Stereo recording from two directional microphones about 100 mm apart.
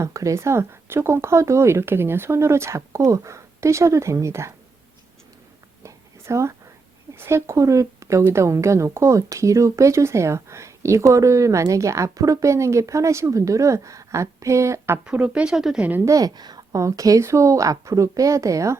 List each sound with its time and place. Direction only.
0.0 s speech: 30° right (ahead or behind)
5.8 s a sound: 30° right (ahead or behind)
7.2 s speech: 25° right (ahead or behind)
15.0 s speech: 10° right (ahead or behind)
16.0 s speech: 35° right (ahead or behind)